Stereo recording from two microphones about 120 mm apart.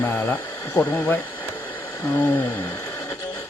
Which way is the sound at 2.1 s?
20° left (ahead or behind).